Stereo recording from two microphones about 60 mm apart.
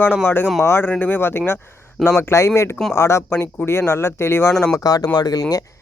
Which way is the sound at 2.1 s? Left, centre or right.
Left.